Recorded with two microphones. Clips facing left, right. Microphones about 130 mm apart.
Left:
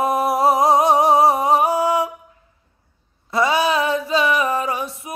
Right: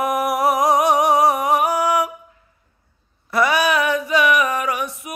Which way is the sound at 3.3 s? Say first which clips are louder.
Even; 25° left (ahead or behind).